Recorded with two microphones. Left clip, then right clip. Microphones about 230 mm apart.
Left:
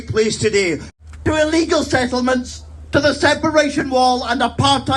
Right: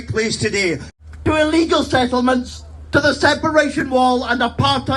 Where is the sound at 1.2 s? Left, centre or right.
Centre.